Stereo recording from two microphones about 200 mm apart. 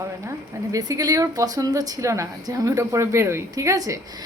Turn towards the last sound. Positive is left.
turn(degrees=-15)  # may be behind; listen again after turning